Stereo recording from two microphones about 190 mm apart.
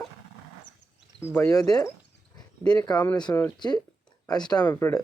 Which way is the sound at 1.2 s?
15° left (ahead or behind).